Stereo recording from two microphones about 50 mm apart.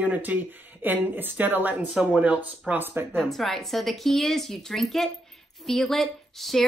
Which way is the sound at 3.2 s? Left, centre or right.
Centre.